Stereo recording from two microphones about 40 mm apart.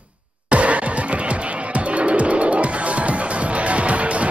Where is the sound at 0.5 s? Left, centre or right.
Right.